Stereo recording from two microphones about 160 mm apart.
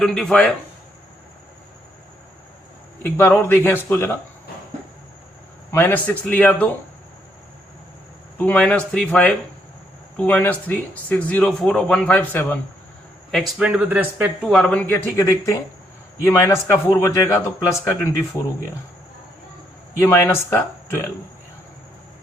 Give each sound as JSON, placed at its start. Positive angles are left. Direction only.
{"t": 0.0, "sound": "speech", "side_deg": 5}
{"t": 3.0, "sound": "speech", "side_deg": 10}
{"t": 5.7, "sound": "speech", "side_deg": 10}
{"t": 8.4, "sound": "speech", "side_deg": 10}
{"t": 13.3, "sound": "speech", "side_deg": -5}
{"t": 14.4, "sound": "speech", "side_deg": 5}
{"t": 15.1, "sound": "speech", "side_deg": 20}
{"t": 20.0, "sound": "speech", "side_deg": 15}